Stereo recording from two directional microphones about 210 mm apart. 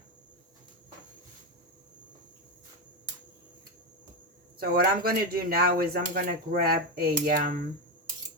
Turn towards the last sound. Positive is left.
turn(degrees=-40)  # may be behind; listen again after turning